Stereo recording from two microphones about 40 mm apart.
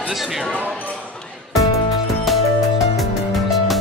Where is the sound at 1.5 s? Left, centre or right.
Centre.